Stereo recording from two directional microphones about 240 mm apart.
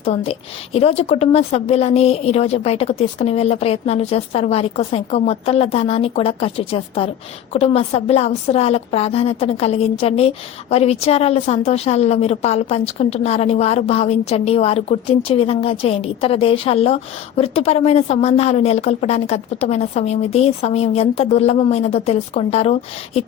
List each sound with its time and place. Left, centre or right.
0.0 s a woman's voice: left